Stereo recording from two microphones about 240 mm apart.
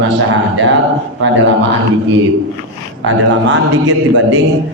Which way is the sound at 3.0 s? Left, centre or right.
Right.